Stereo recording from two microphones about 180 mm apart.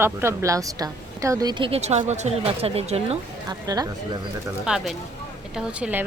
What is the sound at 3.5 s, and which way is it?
Speech, 20° right (ahead or behind).